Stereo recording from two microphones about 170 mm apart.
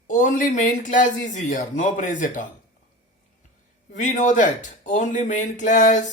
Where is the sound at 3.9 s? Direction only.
45° left (ahead or behind).